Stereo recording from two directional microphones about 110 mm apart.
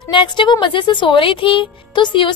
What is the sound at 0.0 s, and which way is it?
Speech, 45° left (ahead or behind).